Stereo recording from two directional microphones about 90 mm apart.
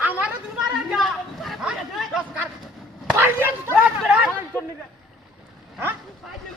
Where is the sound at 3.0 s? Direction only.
20° right (ahead or behind).